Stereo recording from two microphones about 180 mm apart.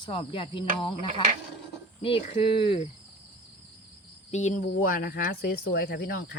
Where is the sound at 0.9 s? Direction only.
40° right (ahead or behind).